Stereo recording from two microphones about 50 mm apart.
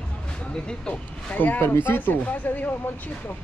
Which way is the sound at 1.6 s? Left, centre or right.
Left.